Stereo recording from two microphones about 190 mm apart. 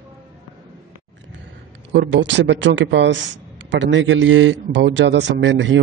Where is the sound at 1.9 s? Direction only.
70° right (ahead or behind).